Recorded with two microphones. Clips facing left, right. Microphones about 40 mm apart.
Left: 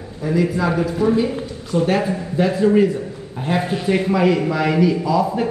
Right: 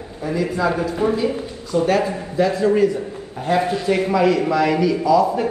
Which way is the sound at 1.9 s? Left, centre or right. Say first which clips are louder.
Even; centre.